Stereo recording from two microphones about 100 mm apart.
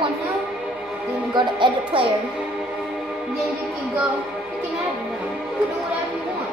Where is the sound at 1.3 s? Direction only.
50° right (ahead or behind).